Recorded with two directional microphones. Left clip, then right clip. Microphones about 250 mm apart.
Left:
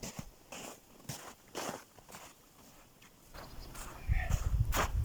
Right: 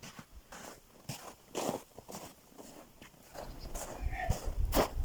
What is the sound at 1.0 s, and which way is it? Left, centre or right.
Walk, centre.